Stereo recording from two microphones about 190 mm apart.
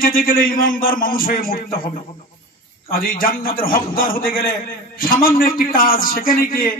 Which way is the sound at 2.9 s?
50° left (ahead or behind).